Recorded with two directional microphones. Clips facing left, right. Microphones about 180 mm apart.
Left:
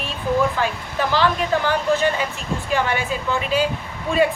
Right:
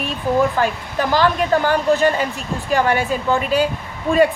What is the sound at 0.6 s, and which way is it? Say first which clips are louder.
A woman's voice: right 3 dB; 45° right (ahead or behind).